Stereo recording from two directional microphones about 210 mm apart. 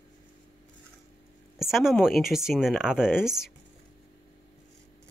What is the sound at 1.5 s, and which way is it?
Speech, centre (ahead or behind).